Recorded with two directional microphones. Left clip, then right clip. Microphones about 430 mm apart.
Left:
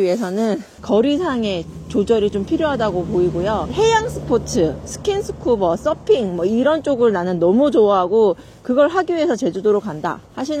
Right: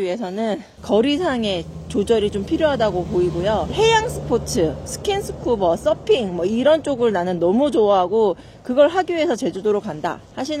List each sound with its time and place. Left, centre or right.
0.0 s a woman's voice: centre